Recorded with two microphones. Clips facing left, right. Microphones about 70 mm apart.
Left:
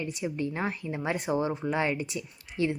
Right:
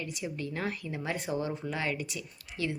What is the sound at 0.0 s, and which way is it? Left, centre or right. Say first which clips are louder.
Speech: left 5 dB; left.